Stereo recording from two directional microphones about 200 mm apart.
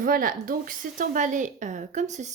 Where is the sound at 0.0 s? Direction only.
45° right (ahead or behind).